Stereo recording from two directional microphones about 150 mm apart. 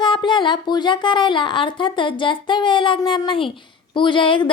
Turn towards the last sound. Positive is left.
turn(degrees=35)  # may be behind; listen again after turning